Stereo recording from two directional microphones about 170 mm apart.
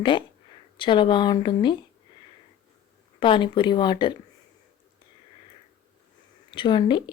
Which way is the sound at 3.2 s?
30° left (ahead or behind).